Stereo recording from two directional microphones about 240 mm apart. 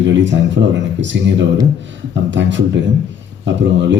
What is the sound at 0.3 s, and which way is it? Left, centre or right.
Speech, right.